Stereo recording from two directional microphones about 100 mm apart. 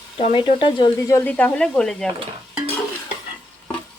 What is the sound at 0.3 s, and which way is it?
Speech, 55° left (ahead or behind).